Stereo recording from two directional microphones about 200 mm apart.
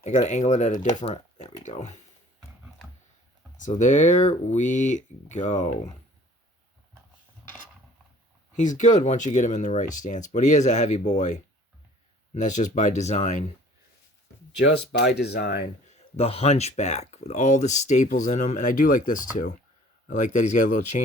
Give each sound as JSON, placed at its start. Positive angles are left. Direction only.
{"t": 0.0, "sound": "speech", "side_deg": 35}
{"t": 3.6, "sound": "speech", "side_deg": 40}
{"t": 8.5, "sound": "speech", "side_deg": 40}
{"t": 14.6, "sound": "speech", "side_deg": 55}
{"t": 15.9, "sound": "speech", "side_deg": 30}